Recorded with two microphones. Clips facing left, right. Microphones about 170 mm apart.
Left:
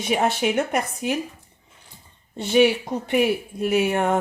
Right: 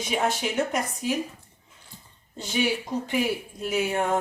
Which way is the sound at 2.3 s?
60° left (ahead or behind).